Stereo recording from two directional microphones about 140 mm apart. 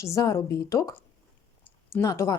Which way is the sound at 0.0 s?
20° left (ahead or behind).